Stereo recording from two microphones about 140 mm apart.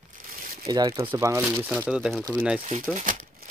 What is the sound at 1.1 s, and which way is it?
Speech, 20° right (ahead or behind).